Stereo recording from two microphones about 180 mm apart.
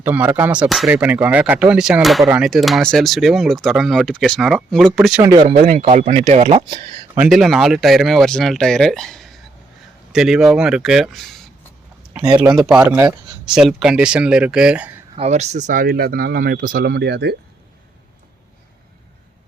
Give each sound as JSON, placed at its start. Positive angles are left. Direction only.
{"t": 0.0, "sound": "speech", "side_deg": -10}
{"t": 5.2, "sound": "speech", "side_deg": -25}
{"t": 5.8, "sound": "speech", "side_deg": -40}
{"t": 7.2, "sound": "speech", "side_deg": 0}
{"t": 15.1, "sound": "speech", "side_deg": -35}